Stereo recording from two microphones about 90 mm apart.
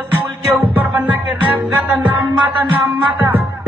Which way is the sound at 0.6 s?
20° right (ahead or behind).